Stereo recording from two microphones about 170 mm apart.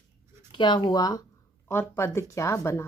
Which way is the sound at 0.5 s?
25° left (ahead or behind).